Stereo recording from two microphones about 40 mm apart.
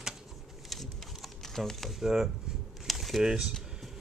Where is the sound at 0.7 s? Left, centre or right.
Centre.